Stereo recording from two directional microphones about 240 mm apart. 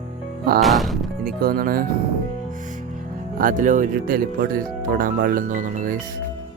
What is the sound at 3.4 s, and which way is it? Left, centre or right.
Speech, right.